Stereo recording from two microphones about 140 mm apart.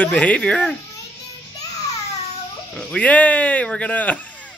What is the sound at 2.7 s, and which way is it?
Speech, 10° left (ahead or behind).